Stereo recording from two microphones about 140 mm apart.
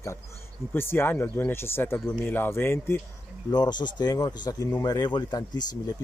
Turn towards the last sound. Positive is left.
turn(degrees=30)  # may be behind; listen again after turning